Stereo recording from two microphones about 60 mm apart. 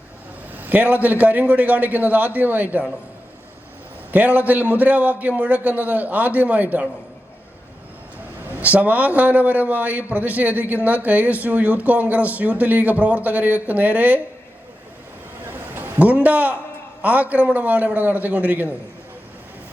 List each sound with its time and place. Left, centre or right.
0.5 s a sound: right
1.0 s speech: right
4.1 s speech: right
8.6 s speech: right
15.4 s a sound: right
16.0 s speech: right